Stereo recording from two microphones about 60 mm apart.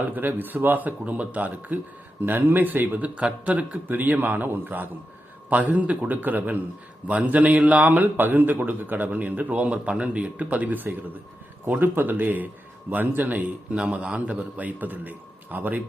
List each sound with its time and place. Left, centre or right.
0.0 s a man's voice: right
7.8 s a man's voice: right